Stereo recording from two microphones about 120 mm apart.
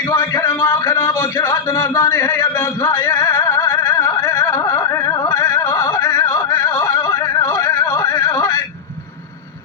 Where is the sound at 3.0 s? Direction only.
25° left (ahead or behind).